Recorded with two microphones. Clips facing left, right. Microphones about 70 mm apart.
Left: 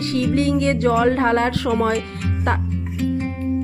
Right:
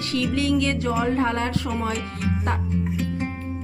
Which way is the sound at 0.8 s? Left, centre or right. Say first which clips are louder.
Left 6 dB; left.